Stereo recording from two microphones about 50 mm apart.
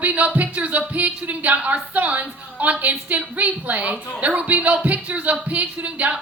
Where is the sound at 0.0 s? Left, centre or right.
Right.